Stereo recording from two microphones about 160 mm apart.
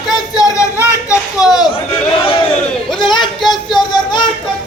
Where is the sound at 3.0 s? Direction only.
30° left (ahead or behind).